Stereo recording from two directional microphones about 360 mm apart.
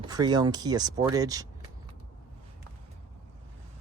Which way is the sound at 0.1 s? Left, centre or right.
Centre.